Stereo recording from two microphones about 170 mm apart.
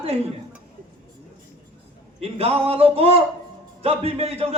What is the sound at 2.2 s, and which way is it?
A man's voice, 35° right (ahead or behind).